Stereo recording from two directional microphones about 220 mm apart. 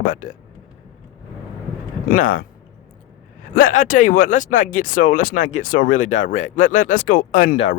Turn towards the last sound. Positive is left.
turn(degrees=35)  # may be behind; listen again after turning